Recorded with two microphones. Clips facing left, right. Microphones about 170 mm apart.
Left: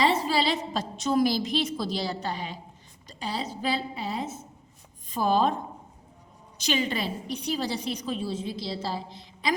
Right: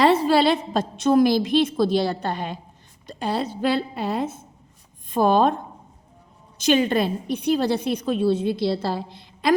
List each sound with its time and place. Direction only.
0.0 s a woman's voice: 60° right (ahead or behind)
6.6 s a woman's voice: 50° right (ahead or behind)